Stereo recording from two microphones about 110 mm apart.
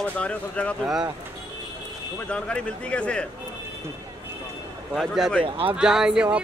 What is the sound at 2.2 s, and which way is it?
Speech, 10° left (ahead or behind).